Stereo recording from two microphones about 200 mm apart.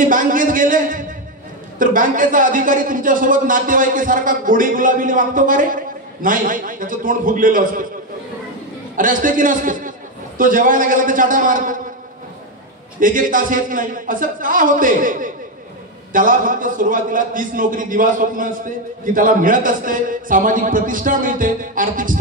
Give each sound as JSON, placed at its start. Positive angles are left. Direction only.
{"t": 0.0, "sound": "a sound", "side_deg": -40}
{"t": 1.8, "sound": "a man's voice", "side_deg": -40}
{"t": 8.9, "sound": "a man's voice", "side_deg": -40}
{"t": 13.0, "sound": "a man's voice", "side_deg": -40}